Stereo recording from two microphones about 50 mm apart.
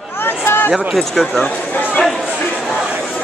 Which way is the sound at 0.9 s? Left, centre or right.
Centre.